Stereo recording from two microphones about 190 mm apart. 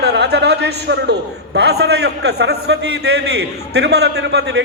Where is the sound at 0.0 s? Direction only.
60° right (ahead or behind).